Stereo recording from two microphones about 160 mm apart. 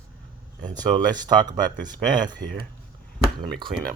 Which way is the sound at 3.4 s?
30° right (ahead or behind).